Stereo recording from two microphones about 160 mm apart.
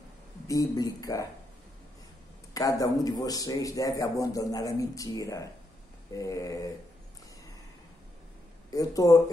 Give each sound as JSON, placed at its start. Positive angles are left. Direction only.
{"t": 0.5, "sound": "a man's voice", "side_deg": 20}
{"t": 2.5, "sound": "a man's voice", "side_deg": 20}
{"t": 8.6, "sound": "speech", "side_deg": 20}